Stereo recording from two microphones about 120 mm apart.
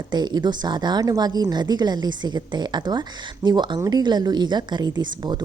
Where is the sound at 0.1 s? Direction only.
35° right (ahead or behind).